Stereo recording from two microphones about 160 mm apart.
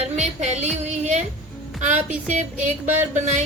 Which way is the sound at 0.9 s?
45° right (ahead or behind).